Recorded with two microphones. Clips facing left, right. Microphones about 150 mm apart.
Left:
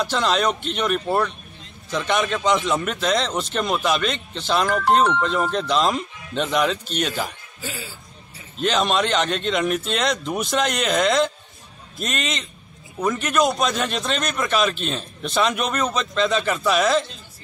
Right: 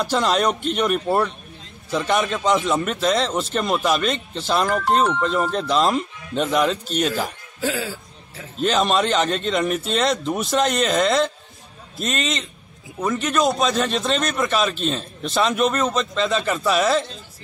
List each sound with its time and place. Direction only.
0.0 s a man's voice: 5° right (ahead or behind)
7.6 s speech: 90° right
8.5 s a man's voice: centre (ahead or behind)